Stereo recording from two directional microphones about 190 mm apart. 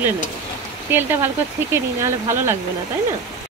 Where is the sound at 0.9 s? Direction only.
10° right (ahead or behind).